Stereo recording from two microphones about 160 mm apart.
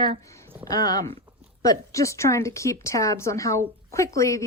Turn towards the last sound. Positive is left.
turn(degrees=20)  # may be behind; listen again after turning